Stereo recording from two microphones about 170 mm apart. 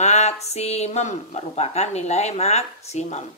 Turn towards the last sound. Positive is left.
turn(degrees=40)  # may be behind; listen again after turning